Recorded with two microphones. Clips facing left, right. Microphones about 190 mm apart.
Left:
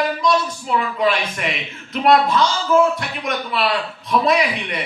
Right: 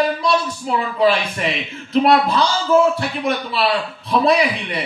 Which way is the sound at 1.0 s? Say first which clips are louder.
Right 3 dB; 30° right (ahead or behind).